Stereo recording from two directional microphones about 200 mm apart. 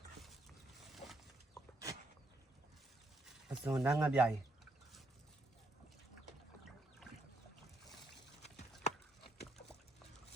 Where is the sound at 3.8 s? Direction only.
5° right (ahead or behind).